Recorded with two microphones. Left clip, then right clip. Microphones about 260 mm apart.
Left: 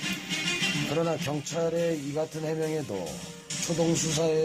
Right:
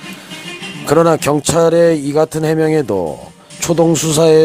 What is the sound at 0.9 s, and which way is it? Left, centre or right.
Speech, right.